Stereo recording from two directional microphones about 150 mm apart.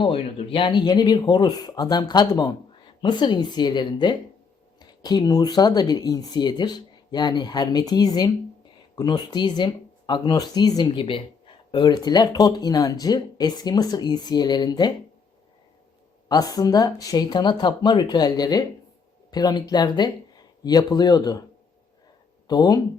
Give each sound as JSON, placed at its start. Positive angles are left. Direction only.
{"t": 0.0, "sound": "speech", "side_deg": 40}
{"t": 16.3, "sound": "speech", "side_deg": 25}
{"t": 22.4, "sound": "speech", "side_deg": 25}